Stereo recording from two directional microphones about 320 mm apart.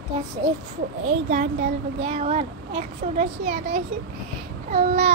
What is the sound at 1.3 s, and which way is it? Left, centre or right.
A child's voice, right.